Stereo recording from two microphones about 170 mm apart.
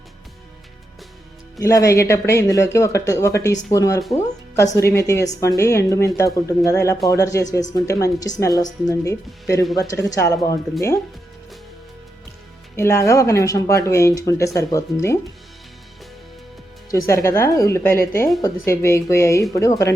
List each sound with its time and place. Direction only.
1.5 s speech: 20° left (ahead or behind)
12.7 s speech: 15° left (ahead or behind)
16.9 s speech: 15° left (ahead or behind)